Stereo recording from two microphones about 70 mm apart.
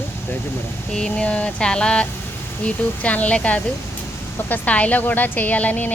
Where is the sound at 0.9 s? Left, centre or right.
Centre.